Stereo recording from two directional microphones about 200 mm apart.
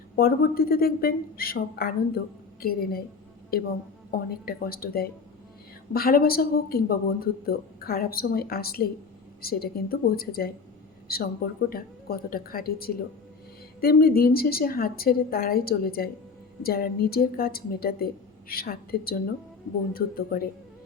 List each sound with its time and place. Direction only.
0.2 s speech: 50° left (ahead or behind)